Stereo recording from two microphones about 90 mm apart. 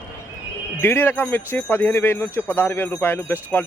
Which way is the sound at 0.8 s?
25° left (ahead or behind).